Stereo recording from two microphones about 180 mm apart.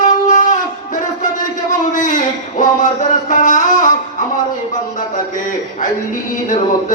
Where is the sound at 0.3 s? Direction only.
45° left (ahead or behind).